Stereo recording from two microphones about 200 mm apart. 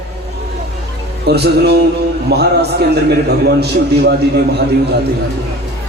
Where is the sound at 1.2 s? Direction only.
55° right (ahead or behind).